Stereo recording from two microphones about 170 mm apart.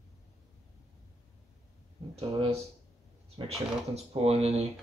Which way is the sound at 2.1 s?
35° right (ahead or behind).